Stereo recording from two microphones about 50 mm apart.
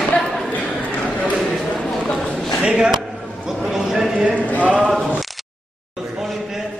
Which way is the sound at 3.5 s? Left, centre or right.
Centre.